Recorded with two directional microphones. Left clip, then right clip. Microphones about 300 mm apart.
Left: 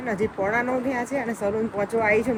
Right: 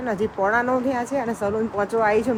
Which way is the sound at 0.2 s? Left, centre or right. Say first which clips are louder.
Right 3 dB; centre.